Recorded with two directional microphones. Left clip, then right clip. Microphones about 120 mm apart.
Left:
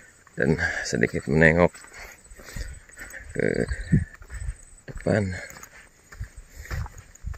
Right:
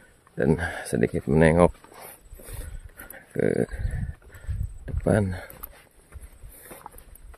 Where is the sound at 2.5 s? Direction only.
25° right (ahead or behind).